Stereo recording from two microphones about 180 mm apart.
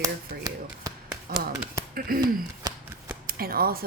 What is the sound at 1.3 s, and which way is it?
Speech, 55° right (ahead or behind).